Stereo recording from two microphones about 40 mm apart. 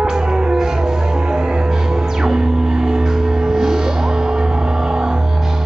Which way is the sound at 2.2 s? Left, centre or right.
Centre.